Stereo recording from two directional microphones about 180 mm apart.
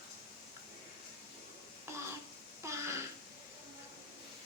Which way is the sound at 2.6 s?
15° right (ahead or behind).